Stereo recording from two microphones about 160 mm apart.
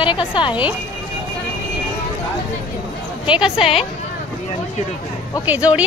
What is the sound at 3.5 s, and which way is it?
Speech, 35° left (ahead or behind).